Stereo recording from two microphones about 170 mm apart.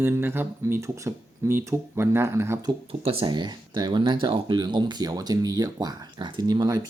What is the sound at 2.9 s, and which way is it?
Speech, 35° right (ahead or behind).